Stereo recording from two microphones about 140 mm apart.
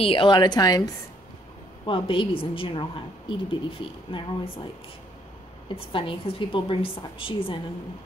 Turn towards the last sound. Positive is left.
turn(degrees=40)  # may be behind; listen again after turning